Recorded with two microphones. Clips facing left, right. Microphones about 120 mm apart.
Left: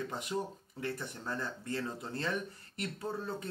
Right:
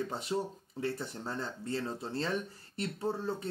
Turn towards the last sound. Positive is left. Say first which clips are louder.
# right 4 dB
turn(degrees=-30)  # may be behind; listen again after turning